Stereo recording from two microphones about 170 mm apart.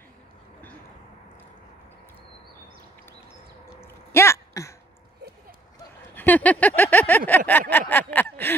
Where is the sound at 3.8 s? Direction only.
15° left (ahead or behind).